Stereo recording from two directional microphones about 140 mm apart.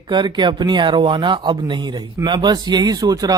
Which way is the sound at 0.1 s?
35° right (ahead or behind).